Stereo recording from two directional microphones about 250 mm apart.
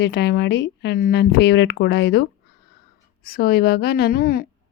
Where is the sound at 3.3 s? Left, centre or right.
Left.